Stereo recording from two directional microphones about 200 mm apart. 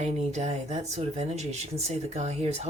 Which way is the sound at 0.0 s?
35° right (ahead or behind).